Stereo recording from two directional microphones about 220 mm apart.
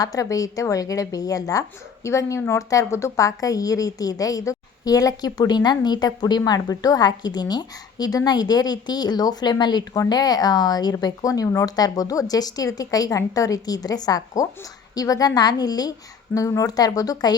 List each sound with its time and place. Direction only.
0.0 s a woman's voice: 15° left (ahead or behind)